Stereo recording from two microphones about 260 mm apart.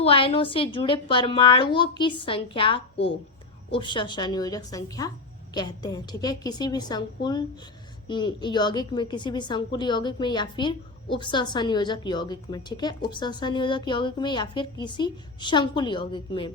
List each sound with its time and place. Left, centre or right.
0.0 s a woman's voice: left